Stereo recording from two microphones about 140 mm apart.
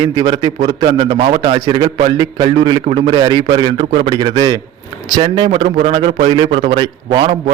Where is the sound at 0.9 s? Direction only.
40° right (ahead or behind).